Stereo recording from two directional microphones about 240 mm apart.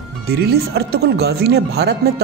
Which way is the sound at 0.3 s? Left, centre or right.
Right.